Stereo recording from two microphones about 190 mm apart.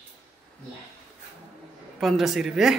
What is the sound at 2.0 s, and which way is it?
Speech, centre (ahead or behind).